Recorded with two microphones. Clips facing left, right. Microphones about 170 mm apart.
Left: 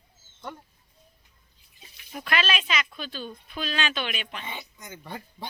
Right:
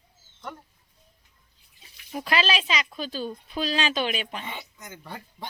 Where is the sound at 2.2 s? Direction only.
30° right (ahead or behind).